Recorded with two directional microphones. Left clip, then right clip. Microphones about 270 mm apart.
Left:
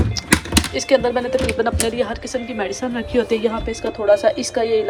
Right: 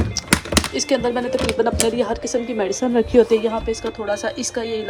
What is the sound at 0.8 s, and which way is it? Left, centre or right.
A woman's voice, centre.